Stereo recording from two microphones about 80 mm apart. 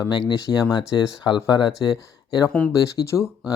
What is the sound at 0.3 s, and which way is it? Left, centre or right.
Speech, left.